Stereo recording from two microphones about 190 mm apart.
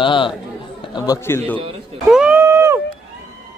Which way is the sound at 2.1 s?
5° right (ahead or behind).